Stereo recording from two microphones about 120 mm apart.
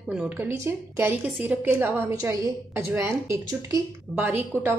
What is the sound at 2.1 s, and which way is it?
A woman's voice, 25° right (ahead or behind).